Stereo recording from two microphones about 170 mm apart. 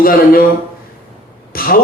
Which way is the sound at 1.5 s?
60° left (ahead or behind).